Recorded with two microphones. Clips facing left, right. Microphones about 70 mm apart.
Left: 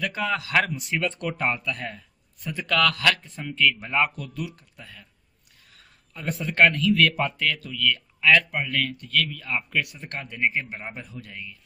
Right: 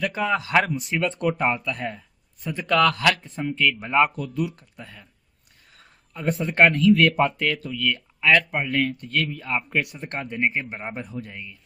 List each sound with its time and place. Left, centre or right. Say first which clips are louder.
0.0 s speech: right 3 dB; right
10.9 s speech: right 5 dB; right